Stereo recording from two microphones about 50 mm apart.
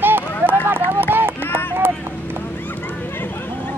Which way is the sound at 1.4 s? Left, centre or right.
Left.